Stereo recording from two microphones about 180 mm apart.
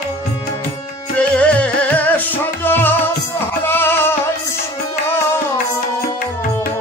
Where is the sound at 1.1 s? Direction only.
5° left (ahead or behind).